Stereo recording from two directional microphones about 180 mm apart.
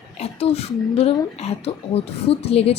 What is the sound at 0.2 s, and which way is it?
Speech, 35° left (ahead or behind).